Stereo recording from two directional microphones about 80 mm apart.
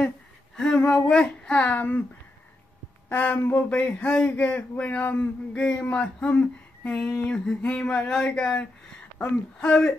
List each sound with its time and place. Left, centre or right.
0.6 s speech: centre
3.1 s speech: left
9.7 s speech: centre